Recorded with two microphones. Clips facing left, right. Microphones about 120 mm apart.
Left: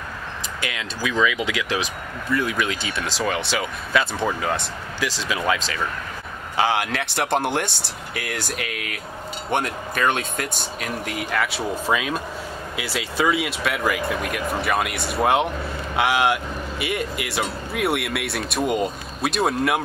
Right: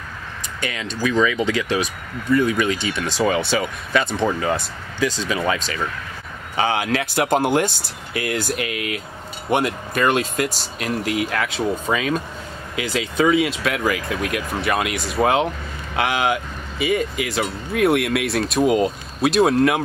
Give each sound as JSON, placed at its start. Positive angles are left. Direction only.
{"t": 0.6, "sound": "speech", "side_deg": 5}